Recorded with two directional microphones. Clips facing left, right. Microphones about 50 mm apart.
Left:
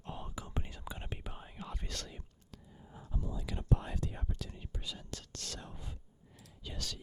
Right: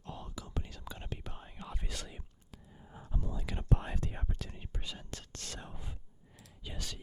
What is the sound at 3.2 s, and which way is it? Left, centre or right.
Whispering, right.